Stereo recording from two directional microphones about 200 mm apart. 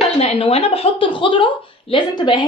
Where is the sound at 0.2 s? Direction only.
30° left (ahead or behind).